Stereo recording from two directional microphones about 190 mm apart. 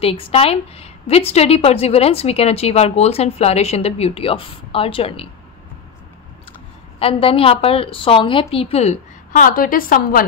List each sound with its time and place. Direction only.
0.0 s a woman's voice: 30° left (ahead or behind)
7.0 s a woman's voice: 30° left (ahead or behind); by 10.2 s 45° left (ahead or behind)